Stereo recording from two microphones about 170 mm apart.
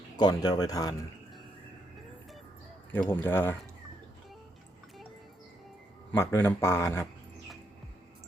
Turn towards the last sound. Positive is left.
turn(degrees=15)  # may be behind; listen again after turning